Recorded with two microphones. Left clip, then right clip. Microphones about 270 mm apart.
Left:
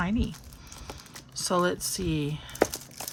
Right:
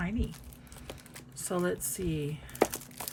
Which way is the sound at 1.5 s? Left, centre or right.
Centre.